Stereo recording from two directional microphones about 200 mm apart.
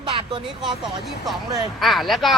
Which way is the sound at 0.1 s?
25° right (ahead or behind).